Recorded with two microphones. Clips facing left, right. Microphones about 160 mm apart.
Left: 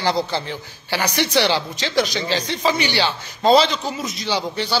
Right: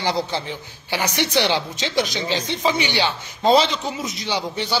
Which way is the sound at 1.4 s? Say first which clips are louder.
Left 1 dB; 15° right (ahead or behind).